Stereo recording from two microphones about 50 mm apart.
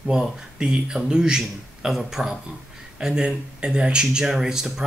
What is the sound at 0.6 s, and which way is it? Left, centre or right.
Speech, centre.